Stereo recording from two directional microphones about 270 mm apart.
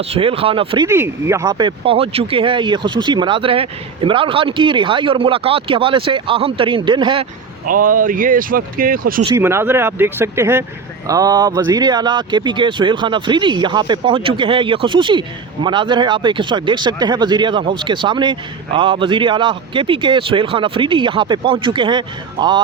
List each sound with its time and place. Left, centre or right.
0.0 s speech: right
7.6 s speech: right
9.2 s speech: centre